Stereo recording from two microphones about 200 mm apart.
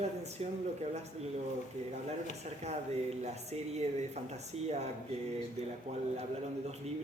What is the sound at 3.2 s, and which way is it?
A man's voice, 35° right (ahead or behind).